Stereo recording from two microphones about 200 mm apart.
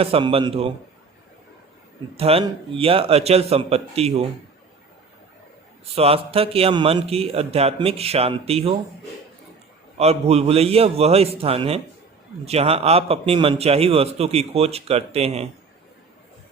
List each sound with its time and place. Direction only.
0.0 s a man's voice: 30° right (ahead or behind)
2.1 s a man's voice: 30° right (ahead or behind)
5.9 s a man's voice: 30° right (ahead or behind)
10.0 s a man's voice: 30° right (ahead or behind)